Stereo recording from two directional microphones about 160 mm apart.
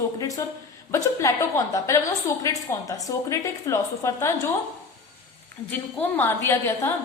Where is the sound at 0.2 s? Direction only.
20° left (ahead or behind).